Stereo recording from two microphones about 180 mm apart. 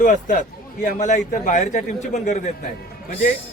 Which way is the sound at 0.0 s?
45° left (ahead or behind).